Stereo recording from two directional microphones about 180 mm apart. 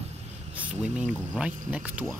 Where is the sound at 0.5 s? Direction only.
10° right (ahead or behind).